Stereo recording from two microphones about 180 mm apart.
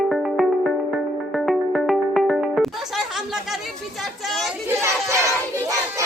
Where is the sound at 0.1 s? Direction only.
Centre (ahead or behind).